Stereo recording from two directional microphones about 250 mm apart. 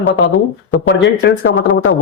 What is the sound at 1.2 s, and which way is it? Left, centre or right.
Speech, left.